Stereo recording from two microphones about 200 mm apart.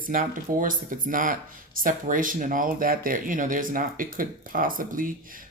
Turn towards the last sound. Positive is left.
turn(degrees=-45)  # may be behind; listen again after turning